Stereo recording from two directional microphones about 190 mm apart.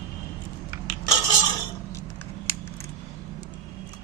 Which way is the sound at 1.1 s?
20° left (ahead or behind).